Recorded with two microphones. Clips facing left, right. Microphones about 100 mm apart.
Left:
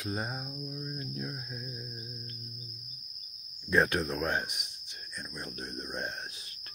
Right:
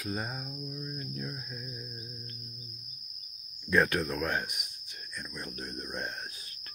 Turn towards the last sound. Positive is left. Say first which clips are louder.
# even
turn(degrees=15)  # may be behind; listen again after turning